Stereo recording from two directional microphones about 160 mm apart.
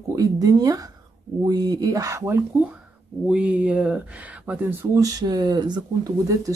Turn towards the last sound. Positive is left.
turn(degrees=-20)  # may be behind; listen again after turning